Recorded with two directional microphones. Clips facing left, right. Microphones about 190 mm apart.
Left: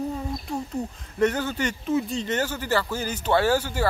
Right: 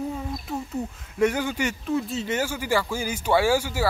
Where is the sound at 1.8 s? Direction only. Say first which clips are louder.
Left 3 dB; centre (ahead or behind).